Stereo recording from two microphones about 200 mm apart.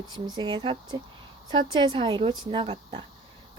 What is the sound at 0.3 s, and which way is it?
A woman's voice, 25° right (ahead or behind).